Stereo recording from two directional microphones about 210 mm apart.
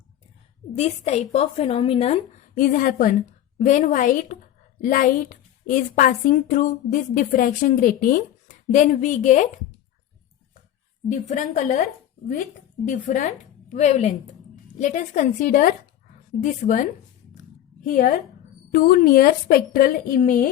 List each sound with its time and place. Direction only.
0.7 s a woman's voice: 30° left (ahead or behind)
11.1 s a woman's voice: 35° left (ahead or behind)
12.9 s a woman's voice: 35° left (ahead or behind)